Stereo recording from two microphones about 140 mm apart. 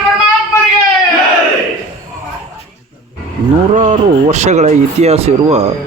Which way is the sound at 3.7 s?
60° right (ahead or behind).